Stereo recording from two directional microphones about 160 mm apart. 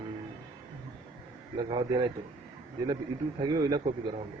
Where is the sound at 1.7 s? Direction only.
30° right (ahead or behind).